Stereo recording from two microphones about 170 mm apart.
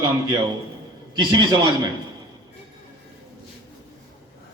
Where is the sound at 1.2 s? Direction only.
25° right (ahead or behind).